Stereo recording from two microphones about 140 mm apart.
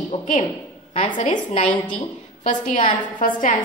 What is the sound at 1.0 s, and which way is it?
Speech, 35° left (ahead or behind).